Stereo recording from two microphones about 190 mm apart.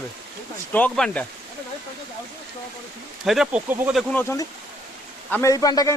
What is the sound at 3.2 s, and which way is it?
Speech, 5° right (ahead or behind).